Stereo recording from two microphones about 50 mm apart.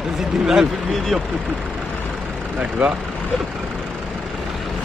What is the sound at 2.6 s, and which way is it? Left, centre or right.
Speech, right.